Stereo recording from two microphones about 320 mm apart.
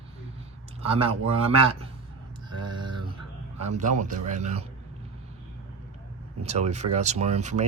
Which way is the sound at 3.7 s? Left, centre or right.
Right.